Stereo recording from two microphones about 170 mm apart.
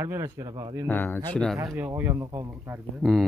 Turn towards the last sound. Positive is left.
turn(degrees=-10)  # may be behind; listen again after turning